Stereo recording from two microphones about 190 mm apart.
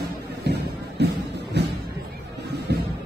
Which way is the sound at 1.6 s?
65° right (ahead or behind).